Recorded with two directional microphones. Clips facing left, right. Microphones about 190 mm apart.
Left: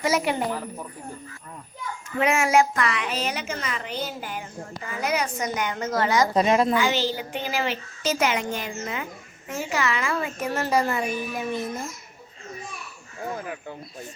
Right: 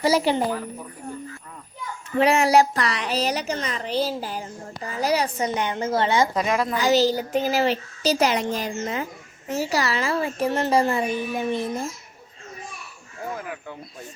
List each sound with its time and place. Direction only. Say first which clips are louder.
0.0 s a woman's voice: right 4 dB; 30° right (ahead or behind)
2.1 s a woman's voice: right 3 dB; 35° right (ahead or behind)
6.3 s a woman's voice: left 3 dB; 25° left (ahead or behind)
6.7 s a woman's voice: right 4 dB; 40° right (ahead or behind)